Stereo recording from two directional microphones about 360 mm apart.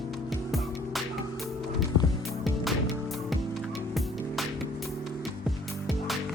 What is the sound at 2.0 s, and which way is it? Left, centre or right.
Music, left.